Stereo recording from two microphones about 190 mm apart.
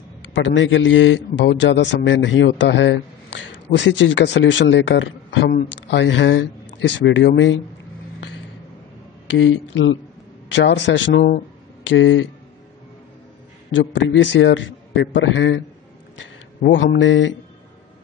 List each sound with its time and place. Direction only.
0.3 s a man's voice: 80° left
9.3 s a man's voice: 80° left
13.7 s a man's voice: 80° left
16.7 s a man's voice: 70° left (ahead or behind)